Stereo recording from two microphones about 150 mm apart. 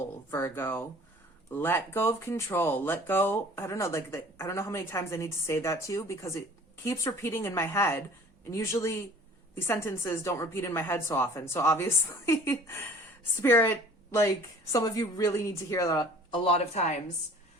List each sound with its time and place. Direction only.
0.3 s speech: 15° left (ahead or behind)
16.4 s speech: 40° left (ahead or behind)